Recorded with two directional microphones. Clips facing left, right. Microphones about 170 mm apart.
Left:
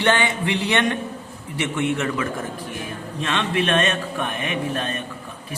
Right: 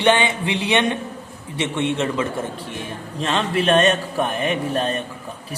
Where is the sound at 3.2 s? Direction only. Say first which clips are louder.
Right 2 dB; 35° right (ahead or behind).